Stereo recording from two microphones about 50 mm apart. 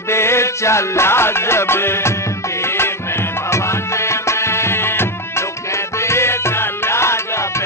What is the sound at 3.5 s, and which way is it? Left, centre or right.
Music, left.